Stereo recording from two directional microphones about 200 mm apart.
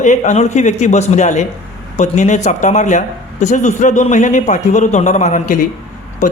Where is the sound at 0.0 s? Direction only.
35° left (ahead or behind).